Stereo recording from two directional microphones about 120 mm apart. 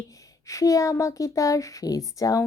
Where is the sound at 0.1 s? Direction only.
30° left (ahead or behind).